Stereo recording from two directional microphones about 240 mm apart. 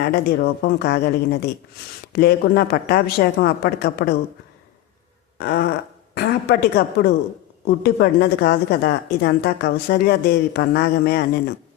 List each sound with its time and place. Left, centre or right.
0.0 s a woman's voice: left
5.4 s a sound: left
6.1 s a woman's voice: left